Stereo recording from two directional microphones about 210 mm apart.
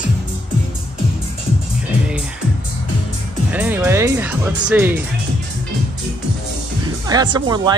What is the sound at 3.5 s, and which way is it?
Speech, 10° right (ahead or behind).